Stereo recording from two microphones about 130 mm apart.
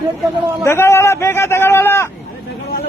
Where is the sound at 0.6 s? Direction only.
20° left (ahead or behind).